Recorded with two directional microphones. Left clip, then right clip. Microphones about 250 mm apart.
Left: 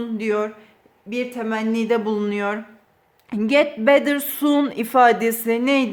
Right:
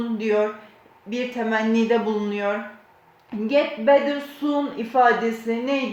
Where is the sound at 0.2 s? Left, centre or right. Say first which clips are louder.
Right 1 dB; left.